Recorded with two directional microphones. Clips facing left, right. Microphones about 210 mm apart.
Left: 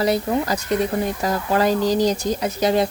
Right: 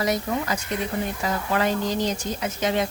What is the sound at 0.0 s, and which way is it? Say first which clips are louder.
Speech: left 5 dB; 35° left (ahead or behind).